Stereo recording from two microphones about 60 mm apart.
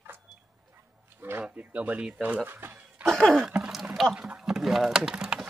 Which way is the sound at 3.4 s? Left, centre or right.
Centre.